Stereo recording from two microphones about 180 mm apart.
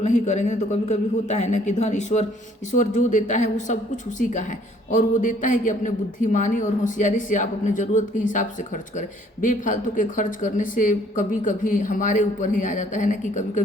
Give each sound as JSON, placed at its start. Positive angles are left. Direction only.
{"t": 0.0, "sound": "a man's voice", "side_deg": 40}